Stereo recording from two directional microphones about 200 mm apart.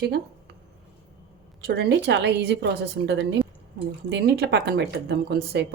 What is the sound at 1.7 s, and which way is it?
A woman's voice, 60° right (ahead or behind).